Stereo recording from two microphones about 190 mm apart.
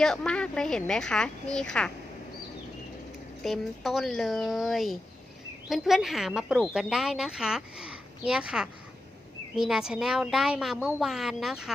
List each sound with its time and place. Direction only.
0.0 s speech: 5° left (ahead or behind)
3.4 s speech: centre (ahead or behind)